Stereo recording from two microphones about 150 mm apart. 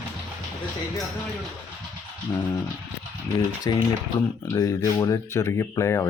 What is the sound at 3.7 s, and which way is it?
Speech, 25° left (ahead or behind).